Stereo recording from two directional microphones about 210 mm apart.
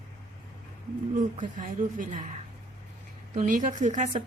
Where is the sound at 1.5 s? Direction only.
40° right (ahead or behind).